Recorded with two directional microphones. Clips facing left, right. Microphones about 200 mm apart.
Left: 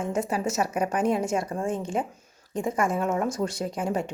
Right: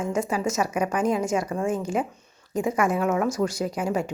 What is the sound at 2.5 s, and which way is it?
Speech, centre (ahead or behind).